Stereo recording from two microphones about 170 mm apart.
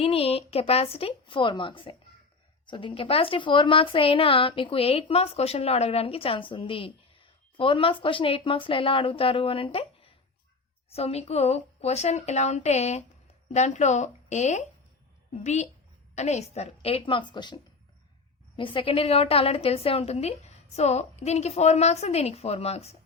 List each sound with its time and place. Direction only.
0.0 s a woman's voice: 35° left (ahead or behind)
16.1 s a woman's voice: 40° left (ahead or behind)